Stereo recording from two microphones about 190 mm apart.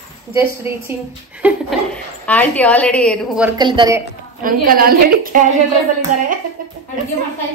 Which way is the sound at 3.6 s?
25° right (ahead or behind).